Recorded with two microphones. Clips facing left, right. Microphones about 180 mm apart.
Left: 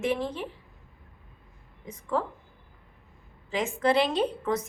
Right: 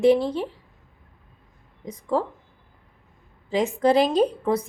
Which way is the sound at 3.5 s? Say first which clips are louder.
Right 5 dB; 35° right (ahead or behind).